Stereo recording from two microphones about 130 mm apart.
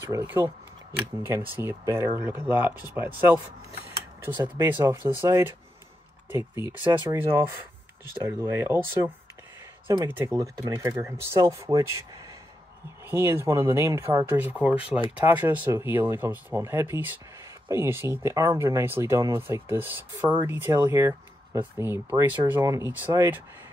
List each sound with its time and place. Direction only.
1.2 s speech: 15° right (ahead or behind)
13.1 s speech: 20° right (ahead or behind)